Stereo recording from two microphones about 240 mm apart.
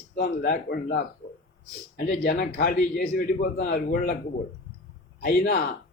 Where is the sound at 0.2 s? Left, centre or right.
Left.